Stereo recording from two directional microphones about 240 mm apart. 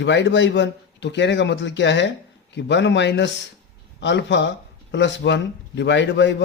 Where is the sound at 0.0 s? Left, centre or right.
Left.